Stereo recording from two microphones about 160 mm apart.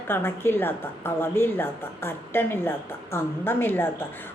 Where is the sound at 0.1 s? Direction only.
15° left (ahead or behind).